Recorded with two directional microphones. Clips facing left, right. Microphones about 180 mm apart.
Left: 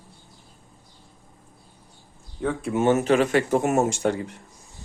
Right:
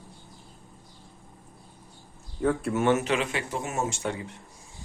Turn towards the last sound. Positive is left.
turn(degrees=40)  # may be behind; listen again after turning